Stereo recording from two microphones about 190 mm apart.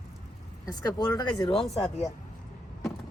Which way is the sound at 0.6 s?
20° left (ahead or behind).